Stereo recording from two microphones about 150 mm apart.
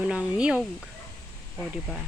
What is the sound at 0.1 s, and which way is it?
Speech, 5° right (ahead or behind).